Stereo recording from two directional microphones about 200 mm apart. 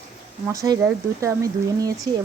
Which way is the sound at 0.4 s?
15° right (ahead or behind).